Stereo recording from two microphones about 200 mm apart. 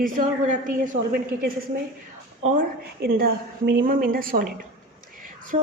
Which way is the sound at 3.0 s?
50° right (ahead or behind).